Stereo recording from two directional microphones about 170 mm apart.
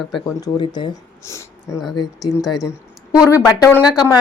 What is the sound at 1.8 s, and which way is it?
Speech, centre (ahead or behind).